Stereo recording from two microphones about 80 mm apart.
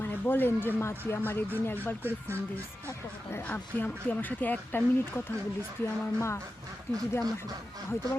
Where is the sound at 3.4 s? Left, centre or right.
Left.